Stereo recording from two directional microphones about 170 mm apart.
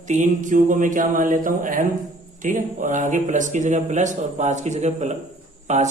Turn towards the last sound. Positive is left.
turn(degrees=-45)  # may be behind; listen again after turning